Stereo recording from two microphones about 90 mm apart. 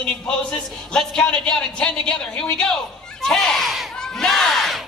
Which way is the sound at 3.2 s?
5° left (ahead or behind).